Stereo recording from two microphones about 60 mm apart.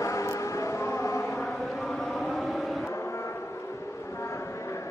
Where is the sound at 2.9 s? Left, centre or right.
Left.